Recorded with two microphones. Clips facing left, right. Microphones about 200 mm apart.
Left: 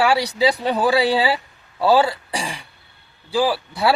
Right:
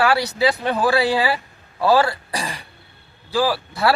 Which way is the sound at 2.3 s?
10° left (ahead or behind).